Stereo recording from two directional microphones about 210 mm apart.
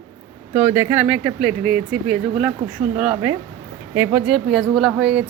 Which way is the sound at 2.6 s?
30° right (ahead or behind).